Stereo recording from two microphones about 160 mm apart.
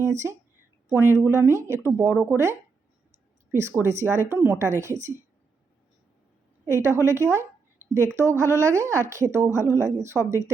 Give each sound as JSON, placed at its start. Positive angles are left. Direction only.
{"t": 0.0, "sound": "a woman's voice", "side_deg": -20}
{"t": 6.7, "sound": "a woman's voice", "side_deg": -15}